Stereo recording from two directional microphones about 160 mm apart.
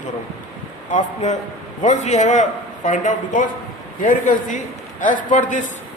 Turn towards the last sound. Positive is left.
turn(degrees=50)  # may be behind; listen again after turning